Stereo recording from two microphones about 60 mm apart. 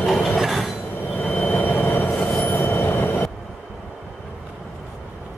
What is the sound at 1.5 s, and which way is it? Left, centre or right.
Train, left.